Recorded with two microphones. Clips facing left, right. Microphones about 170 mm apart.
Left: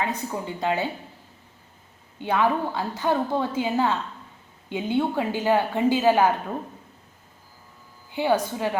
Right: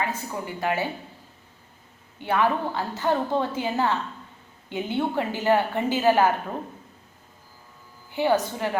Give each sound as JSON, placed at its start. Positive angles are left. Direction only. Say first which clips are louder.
{"t": 0.0, "sound": "a woman's voice", "louder": "left 1 dB", "side_deg": 20}
{"t": 2.1, "sound": "a woman's voice", "louder": "left 1 dB", "side_deg": 15}
{"t": 8.1, "sound": "a woman's voice", "louder": "even", "side_deg": 15}